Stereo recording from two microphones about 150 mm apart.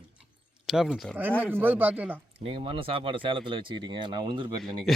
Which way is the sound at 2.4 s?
35° right (ahead or behind).